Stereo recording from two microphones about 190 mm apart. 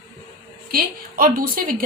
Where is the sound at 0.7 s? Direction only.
50° right (ahead or behind).